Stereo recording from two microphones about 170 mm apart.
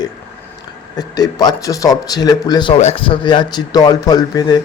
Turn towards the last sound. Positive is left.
turn(degrees=25)  # may be behind; listen again after turning